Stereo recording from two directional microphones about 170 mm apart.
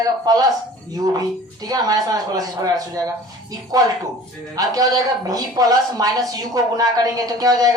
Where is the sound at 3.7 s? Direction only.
20° right (ahead or behind).